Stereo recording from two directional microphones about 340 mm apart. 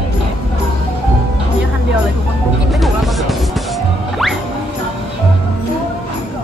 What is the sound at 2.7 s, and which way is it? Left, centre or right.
Music, centre.